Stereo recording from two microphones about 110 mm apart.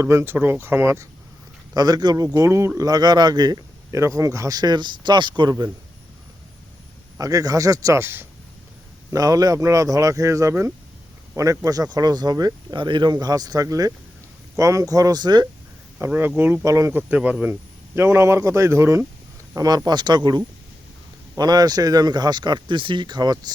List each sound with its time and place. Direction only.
0.0 s a man's voice: 25° right (ahead or behind)
1.7 s speech: 35° right (ahead or behind)
7.2 s speech: 30° right (ahead or behind)
9.0 s speech: 35° right (ahead or behind)
16.0 s a man's voice: 20° right (ahead or behind)
17.0 s a man's voice: 15° right (ahead or behind); by 23.5 s 35° right (ahead or behind)